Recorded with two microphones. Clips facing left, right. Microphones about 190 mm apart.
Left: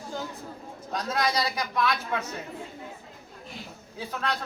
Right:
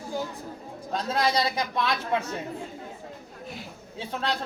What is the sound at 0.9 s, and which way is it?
Speech, 30° right (ahead or behind).